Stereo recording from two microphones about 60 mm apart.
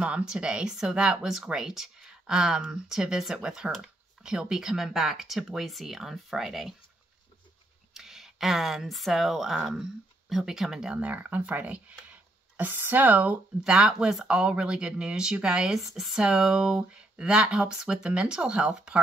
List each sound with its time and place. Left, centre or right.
0.0 s speech: centre
7.9 s speech: centre
11.0 s speech: right
13.7 s speech: centre